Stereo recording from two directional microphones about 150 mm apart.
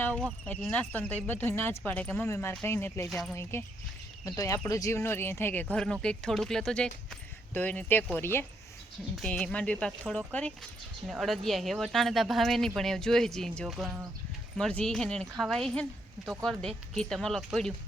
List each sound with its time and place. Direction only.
0.0 s speech: 10° left (ahead or behind)
3.1 s speech: centre (ahead or behind)
3.5 s speech: 20° left (ahead or behind)